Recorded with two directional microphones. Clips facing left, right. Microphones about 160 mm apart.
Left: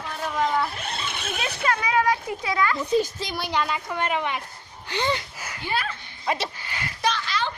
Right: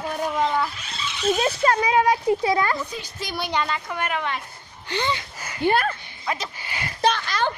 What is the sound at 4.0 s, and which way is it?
Speech, 15° left (ahead or behind).